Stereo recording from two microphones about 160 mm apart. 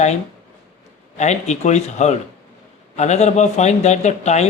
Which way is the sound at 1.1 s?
45° left (ahead or behind).